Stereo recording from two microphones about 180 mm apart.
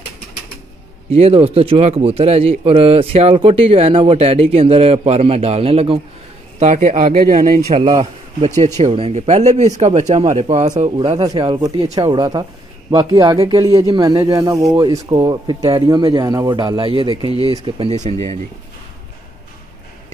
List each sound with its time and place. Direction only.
1.1 s a man's voice: 35° right (ahead or behind)
7.7 s speech: 25° right (ahead or behind)